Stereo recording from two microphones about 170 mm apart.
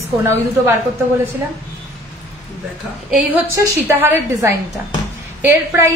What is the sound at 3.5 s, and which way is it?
A woman's voice, 10° right (ahead or behind).